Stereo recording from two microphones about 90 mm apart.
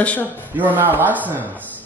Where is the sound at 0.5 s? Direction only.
20° right (ahead or behind).